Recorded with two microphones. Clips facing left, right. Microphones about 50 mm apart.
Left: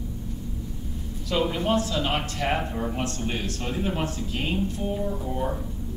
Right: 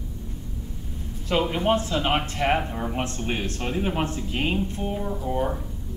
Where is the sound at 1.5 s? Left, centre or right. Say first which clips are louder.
Right 2 dB; right.